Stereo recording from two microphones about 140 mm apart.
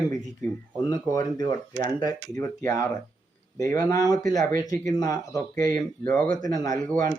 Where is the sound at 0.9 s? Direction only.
25° left (ahead or behind).